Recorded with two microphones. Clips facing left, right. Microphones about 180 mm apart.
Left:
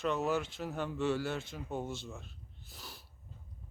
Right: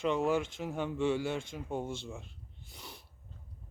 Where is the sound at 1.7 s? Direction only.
5° left (ahead or behind).